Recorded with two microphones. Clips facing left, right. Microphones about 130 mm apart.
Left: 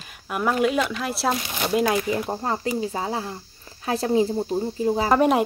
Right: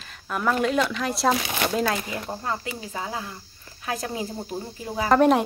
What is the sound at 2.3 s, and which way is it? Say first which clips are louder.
Speech: left 5 dB; 30° left (ahead or behind).